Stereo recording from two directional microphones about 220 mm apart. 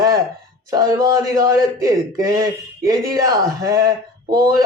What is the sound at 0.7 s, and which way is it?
Speech, 15° right (ahead or behind).